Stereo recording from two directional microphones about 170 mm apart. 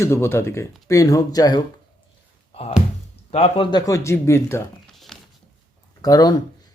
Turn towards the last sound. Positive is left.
turn(degrees=20)  # may be behind; listen again after turning